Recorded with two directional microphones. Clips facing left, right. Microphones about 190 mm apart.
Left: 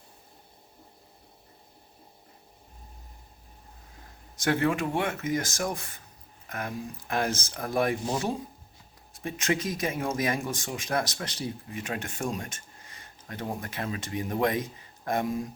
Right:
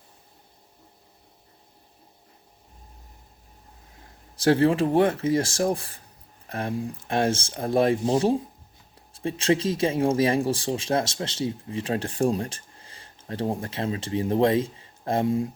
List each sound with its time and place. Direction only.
4.4 s speech: 30° right (ahead or behind)